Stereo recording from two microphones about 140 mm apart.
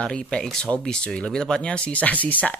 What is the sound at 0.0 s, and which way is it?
Speech, 5° left (ahead or behind).